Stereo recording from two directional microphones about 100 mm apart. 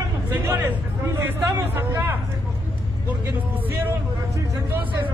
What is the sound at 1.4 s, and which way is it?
Speech, 30° right (ahead or behind).